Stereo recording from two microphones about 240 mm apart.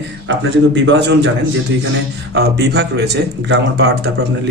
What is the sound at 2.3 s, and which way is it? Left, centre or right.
A man's voice, right.